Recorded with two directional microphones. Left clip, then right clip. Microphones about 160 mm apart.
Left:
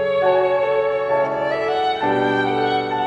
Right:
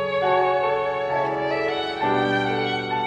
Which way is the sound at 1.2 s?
10° left (ahead or behind).